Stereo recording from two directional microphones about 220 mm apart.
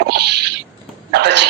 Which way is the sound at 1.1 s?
50° right (ahead or behind).